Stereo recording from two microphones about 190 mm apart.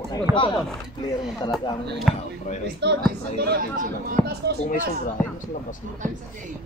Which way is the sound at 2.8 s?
65° right (ahead or behind).